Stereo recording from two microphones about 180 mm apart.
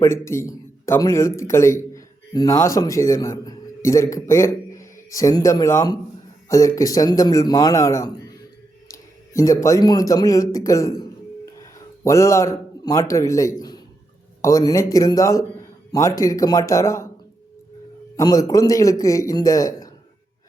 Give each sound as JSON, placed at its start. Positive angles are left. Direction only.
{"t": 0.0, "sound": "a man's voice", "side_deg": 15}
{"t": 12.0, "sound": "a man's voice", "side_deg": 15}
{"t": 18.2, "sound": "a man's voice", "side_deg": 20}